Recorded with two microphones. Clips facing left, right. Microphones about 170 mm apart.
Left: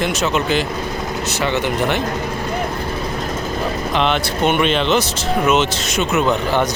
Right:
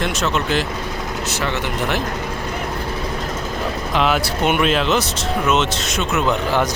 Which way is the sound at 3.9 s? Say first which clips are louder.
Right 1 dB; 5° right (ahead or behind).